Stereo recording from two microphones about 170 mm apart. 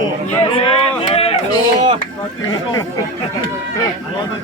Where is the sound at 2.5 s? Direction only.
20° left (ahead or behind).